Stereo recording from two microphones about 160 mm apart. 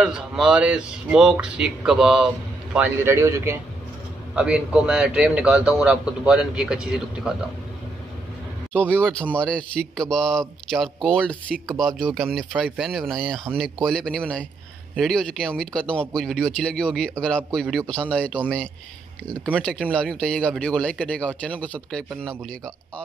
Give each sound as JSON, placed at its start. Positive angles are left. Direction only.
{"t": 0.0, "sound": "speech", "side_deg": -5}
{"t": 2.7, "sound": "a man's voice", "side_deg": -15}
{"t": 4.4, "sound": "speech", "side_deg": -5}
{"t": 8.7, "sound": "speech", "side_deg": 10}